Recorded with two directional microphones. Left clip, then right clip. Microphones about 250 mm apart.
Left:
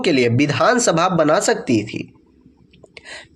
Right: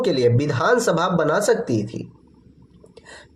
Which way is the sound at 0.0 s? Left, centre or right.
Left.